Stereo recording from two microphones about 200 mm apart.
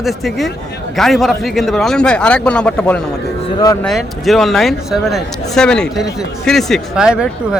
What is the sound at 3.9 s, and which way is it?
Speech, centre (ahead or behind).